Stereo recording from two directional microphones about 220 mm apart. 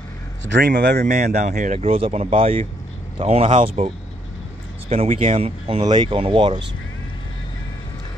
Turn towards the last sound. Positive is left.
turn(degrees=-20)  # may be behind; listen again after turning